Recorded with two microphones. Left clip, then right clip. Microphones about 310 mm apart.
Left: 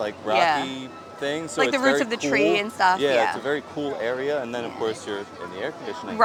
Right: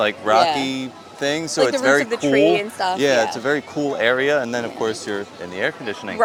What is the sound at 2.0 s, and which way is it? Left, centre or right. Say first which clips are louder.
Speech: right 5 dB; centre.